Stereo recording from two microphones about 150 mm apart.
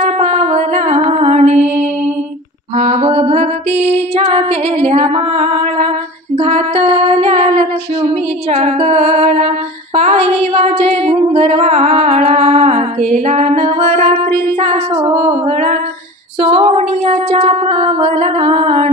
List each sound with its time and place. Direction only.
0.3 s music: 45° right (ahead or behind)
2.8 s mantra: 45° right (ahead or behind)
3.9 s music: 40° right (ahead or behind)
6.3 s a sound: 45° right (ahead or behind)
16.3 s female singing: 45° right (ahead or behind)